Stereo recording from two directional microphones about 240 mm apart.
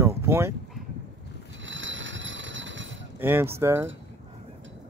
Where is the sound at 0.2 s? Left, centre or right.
Centre.